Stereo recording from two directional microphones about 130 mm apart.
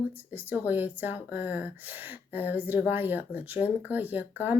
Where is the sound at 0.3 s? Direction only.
15° right (ahead or behind).